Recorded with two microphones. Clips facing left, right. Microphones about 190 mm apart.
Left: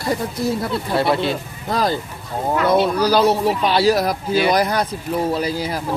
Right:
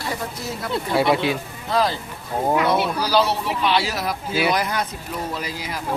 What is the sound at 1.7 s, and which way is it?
Speech, 40° left (ahead or behind).